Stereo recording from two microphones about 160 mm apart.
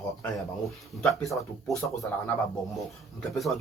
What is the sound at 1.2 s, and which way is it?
Speech, centre (ahead or behind).